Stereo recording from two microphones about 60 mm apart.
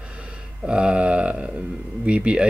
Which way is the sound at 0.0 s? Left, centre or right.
Centre.